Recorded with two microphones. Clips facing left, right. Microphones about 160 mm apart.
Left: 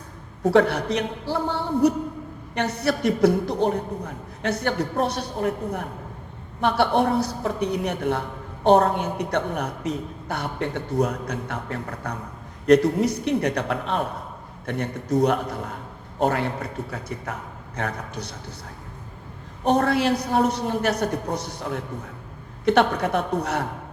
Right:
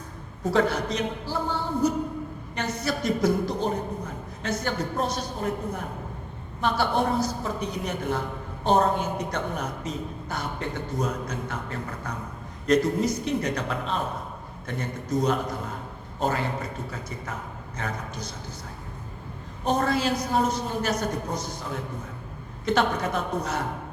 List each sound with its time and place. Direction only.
0.4 s a man's voice: 65° left (ahead or behind)
19.6 s a man's voice: 65° left (ahead or behind)